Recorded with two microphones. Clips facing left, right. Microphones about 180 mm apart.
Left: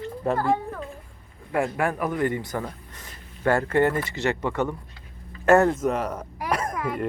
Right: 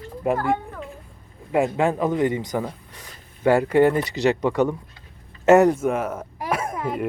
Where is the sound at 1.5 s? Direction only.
20° right (ahead or behind).